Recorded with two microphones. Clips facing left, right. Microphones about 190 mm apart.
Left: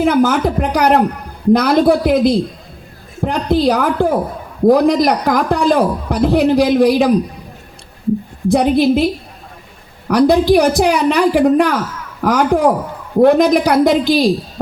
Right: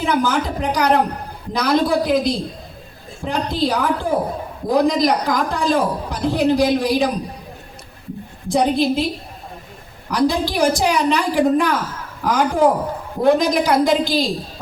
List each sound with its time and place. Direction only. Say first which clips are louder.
0.0 s a woman's voice: left 6 dB; 55° left (ahead or behind)
8.4 s a woman's voice: left 5 dB; 60° left (ahead or behind)
10.1 s a woman's voice: left 8 dB; 60° left (ahead or behind)